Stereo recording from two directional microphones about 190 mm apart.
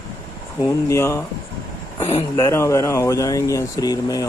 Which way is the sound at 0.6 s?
15° left (ahead or behind).